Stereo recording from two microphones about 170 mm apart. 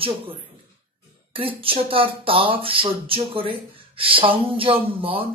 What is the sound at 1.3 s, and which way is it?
Speech, 35° right (ahead or behind).